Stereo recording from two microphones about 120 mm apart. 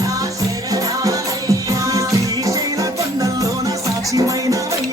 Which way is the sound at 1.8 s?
30° right (ahead or behind).